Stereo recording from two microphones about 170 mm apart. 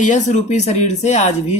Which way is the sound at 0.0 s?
45° left (ahead or behind).